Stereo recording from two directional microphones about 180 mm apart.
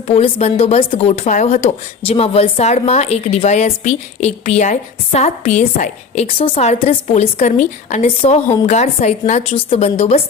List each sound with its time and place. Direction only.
0.1 s a woman's voice: 35° left (ahead or behind)